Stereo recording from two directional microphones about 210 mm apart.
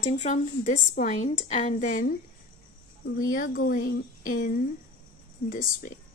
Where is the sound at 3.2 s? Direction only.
40° left (ahead or behind).